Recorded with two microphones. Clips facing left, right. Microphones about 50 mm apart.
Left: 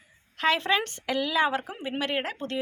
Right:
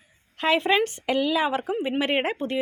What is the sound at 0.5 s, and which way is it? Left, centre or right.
Speech, centre.